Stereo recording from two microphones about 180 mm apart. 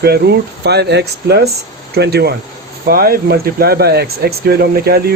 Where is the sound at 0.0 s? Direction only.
65° right (ahead or behind).